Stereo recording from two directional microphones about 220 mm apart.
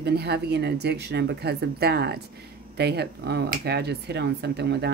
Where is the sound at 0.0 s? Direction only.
45° right (ahead or behind).